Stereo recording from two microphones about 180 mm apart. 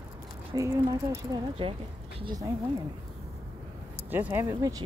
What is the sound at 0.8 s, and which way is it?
Speech, 20° right (ahead or behind).